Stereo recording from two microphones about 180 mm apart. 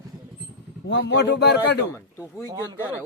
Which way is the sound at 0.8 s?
75° left (ahead or behind).